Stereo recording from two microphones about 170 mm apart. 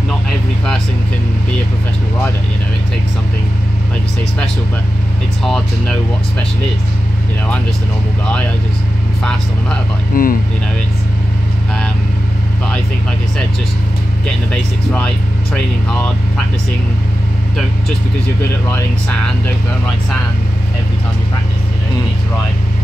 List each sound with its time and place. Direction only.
5.4 s speech: centre (ahead or behind)
10.1 s speech: 60° left (ahead or behind)
14.5 s speech: 5° left (ahead or behind)
18.7 s speech: 5° left (ahead or behind)